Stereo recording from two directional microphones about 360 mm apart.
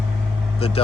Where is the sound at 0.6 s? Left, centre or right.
Centre.